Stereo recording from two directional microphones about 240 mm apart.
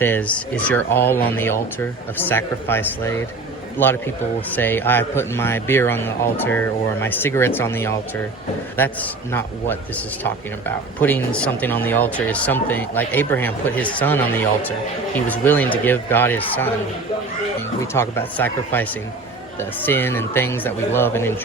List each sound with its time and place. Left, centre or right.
0.0 s a man's voice: centre
17.9 s a man's voice: centre